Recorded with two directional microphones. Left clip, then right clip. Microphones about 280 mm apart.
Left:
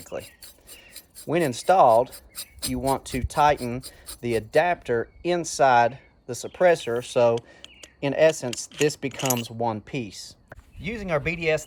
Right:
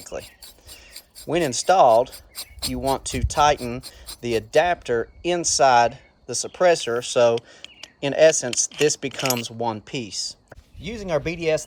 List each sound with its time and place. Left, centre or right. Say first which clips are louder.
0.0 s speech: right 1 dB; centre
1.3 s speech: right 2 dB; centre
2.3 s a sound: right 3 dB; right
2.7 s speech: right 1 dB; centre